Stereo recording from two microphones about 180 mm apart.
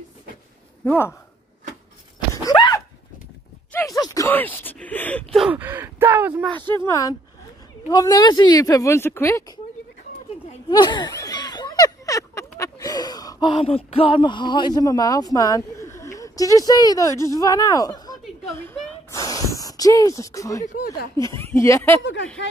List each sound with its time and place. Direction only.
0.8 s speech: 15° left (ahead or behind)
2.3 s a sound: 20° left (ahead or behind)
3.7 s speech: 20° left (ahead or behind); by 6.4 s 10° right (ahead or behind)
6.7 s speech: 15° left (ahead or behind)
10.7 s a sound: 25° left (ahead or behind)
17.2 s a woman's voice: 20° left (ahead or behind)
19.0 s a sound: 20° left (ahead or behind)
20.8 s speech: 60° left (ahead or behind)
21.4 s speech: 15° left (ahead or behind)